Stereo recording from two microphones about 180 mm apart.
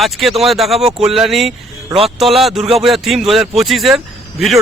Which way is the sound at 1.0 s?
Centre (ahead or behind).